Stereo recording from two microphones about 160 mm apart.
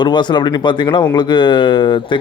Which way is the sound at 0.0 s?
30° left (ahead or behind).